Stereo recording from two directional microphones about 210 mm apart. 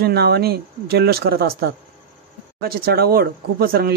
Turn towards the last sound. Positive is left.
turn(degrees=-45)  # may be behind; listen again after turning